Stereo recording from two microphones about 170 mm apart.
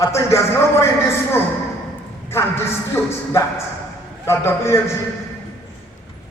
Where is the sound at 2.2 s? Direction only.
15° left (ahead or behind).